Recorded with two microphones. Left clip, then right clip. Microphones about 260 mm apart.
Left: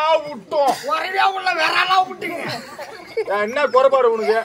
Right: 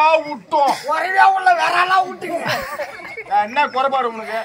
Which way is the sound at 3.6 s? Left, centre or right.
Centre.